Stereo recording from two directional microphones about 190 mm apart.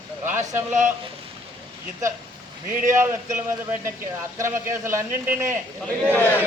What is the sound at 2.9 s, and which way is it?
Speech, 15° right (ahead or behind).